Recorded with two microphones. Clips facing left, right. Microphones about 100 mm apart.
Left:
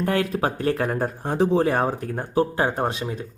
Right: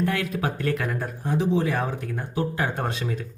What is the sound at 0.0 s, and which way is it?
Speech, 35° left (ahead or behind).